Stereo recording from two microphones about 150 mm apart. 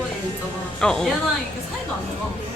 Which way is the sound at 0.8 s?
5° left (ahead or behind).